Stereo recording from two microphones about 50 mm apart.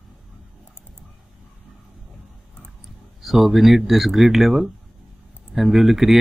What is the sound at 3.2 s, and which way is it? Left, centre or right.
Speech, centre.